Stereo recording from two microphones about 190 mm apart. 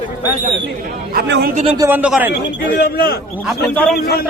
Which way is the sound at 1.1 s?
55° right (ahead or behind).